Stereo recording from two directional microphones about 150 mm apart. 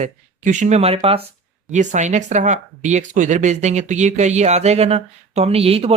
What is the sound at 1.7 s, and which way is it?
Speech, 55° right (ahead or behind).